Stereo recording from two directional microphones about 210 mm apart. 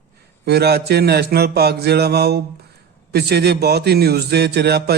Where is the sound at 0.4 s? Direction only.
50° right (ahead or behind).